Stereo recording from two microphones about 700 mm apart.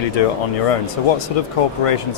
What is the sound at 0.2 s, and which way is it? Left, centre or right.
Speech, left.